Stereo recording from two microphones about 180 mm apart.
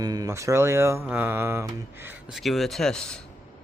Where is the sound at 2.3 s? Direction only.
Centre (ahead or behind).